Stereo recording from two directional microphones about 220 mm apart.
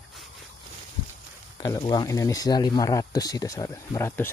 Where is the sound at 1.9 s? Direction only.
15° left (ahead or behind).